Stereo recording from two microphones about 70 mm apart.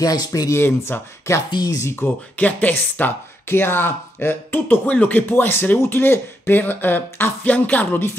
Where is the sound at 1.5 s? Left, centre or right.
Left.